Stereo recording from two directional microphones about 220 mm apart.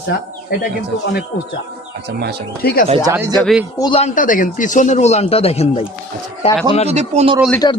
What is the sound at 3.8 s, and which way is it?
Speech, 20° left (ahead or behind).